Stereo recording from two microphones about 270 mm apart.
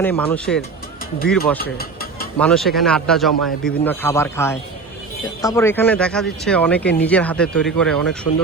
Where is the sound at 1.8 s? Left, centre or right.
Left.